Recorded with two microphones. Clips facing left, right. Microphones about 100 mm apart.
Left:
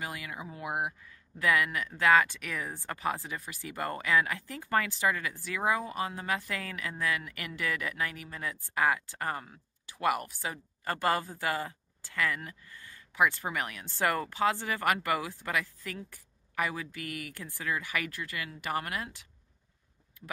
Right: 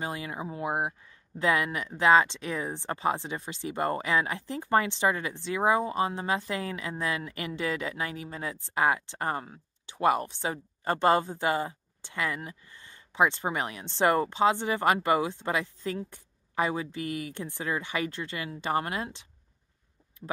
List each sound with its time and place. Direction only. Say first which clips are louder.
0.0 s speech: right 5 dB; 30° right (ahead or behind)